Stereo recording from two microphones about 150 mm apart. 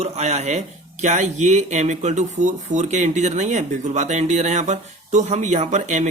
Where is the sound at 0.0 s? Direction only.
50° right (ahead or behind).